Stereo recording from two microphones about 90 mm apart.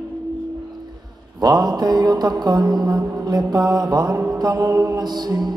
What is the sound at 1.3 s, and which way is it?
Mantra, 50° right (ahead or behind).